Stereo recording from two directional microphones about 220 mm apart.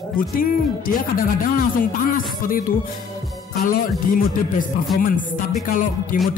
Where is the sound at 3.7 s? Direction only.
40° left (ahead or behind).